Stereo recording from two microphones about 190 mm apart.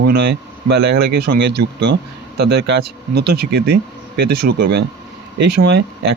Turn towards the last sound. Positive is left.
turn(degrees=-55)  # may be behind; listen again after turning